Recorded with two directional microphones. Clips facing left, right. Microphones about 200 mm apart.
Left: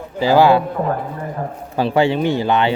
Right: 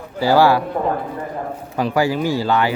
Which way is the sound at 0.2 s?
20° left (ahead or behind).